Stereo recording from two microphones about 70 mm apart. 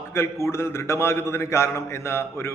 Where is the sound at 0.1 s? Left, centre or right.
Left.